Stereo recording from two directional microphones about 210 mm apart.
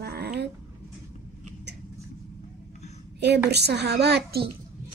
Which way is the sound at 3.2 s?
50° right (ahead or behind).